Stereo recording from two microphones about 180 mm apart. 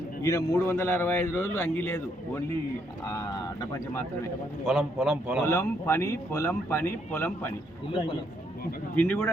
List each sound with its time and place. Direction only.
0.2 s a man's voice: 20° left (ahead or behind)
4.6 s a man's voice: centre (ahead or behind)
5.5 s a man's voice: 15° left (ahead or behind)
9.0 s a man's voice: 10° left (ahead or behind)